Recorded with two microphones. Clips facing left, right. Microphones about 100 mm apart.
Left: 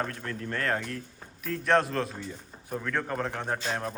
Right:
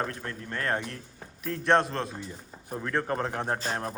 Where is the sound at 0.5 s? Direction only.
20° right (ahead or behind).